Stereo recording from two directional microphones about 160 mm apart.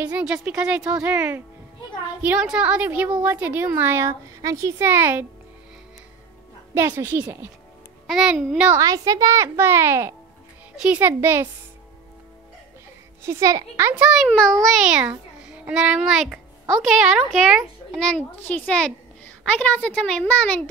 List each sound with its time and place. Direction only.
0.0 s a woman's voice: 5° right (ahead or behind)
6.7 s a woman's voice: 15° right (ahead or behind)
8.1 s a woman's voice: 5° right (ahead or behind)
8.7 s a child's voice: 20° right (ahead or behind)
13.2 s a woman's voice: 20° right (ahead or behind); by 20.6 s 10° left (ahead or behind)